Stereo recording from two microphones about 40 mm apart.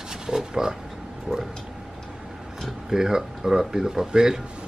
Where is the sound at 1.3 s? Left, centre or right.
Right.